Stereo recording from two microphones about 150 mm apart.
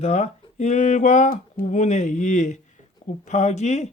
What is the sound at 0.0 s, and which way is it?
Speech, 50° left (ahead or behind).